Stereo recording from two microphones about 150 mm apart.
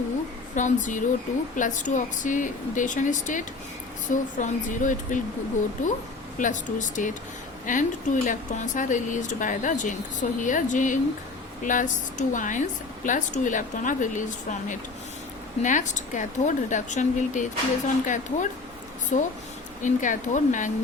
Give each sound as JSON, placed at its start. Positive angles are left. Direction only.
{"t": 0.5, "sound": "a woman's voice", "side_deg": 55}
{"t": 6.4, "sound": "a woman's voice", "side_deg": 55}
{"t": 15.6, "sound": "a woman's voice", "side_deg": 55}